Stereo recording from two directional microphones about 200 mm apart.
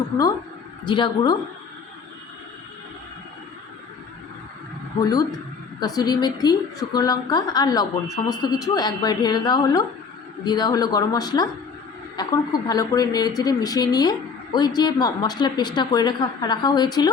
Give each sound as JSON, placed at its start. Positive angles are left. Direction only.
{"t": 0.9, "sound": "speech", "side_deg": 25}
{"t": 4.9, "sound": "speech", "side_deg": 20}